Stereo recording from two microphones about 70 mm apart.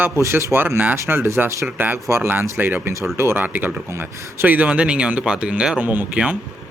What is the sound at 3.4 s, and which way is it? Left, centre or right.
Speech, right.